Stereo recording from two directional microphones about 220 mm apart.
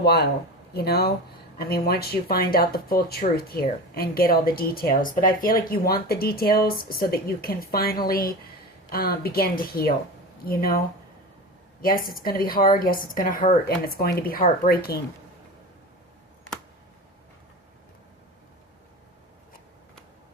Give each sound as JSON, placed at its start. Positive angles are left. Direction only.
{"t": 0.0, "sound": "speech", "side_deg": 45}